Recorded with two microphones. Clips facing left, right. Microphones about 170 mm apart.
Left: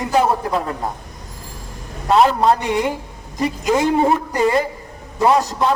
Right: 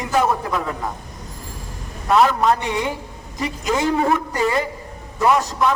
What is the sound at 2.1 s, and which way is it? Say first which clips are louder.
A man's voice: left 2 dB; 30° left (ahead or behind).